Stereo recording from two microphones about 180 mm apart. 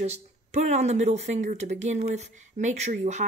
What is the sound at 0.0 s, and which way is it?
Speech, 40° right (ahead or behind).